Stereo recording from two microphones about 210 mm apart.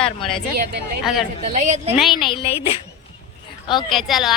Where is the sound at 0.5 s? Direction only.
45° right (ahead or behind).